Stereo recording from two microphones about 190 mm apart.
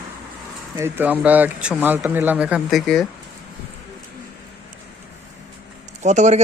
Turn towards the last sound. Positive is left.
turn(degrees=-40)  # may be behind; listen again after turning